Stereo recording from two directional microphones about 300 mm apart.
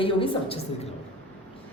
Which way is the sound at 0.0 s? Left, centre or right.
Centre.